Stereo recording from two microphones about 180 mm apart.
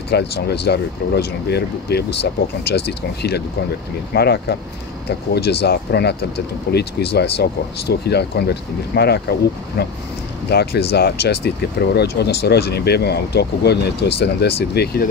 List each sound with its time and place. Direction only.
0.1 s speech: 65° left (ahead or behind)